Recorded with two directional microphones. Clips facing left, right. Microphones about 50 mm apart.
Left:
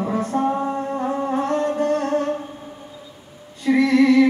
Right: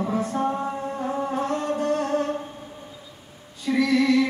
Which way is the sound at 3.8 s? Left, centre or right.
Left.